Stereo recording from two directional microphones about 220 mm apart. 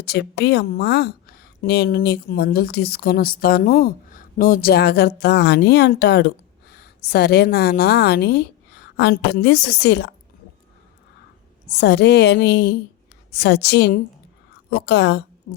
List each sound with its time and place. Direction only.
0.0 s a woman's voice: 50° left (ahead or behind)
11.7 s a woman's voice: 50° left (ahead or behind)
15.5 s speech: 65° left (ahead or behind)